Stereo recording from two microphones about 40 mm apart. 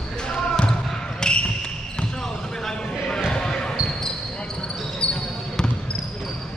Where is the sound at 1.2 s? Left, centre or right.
Centre.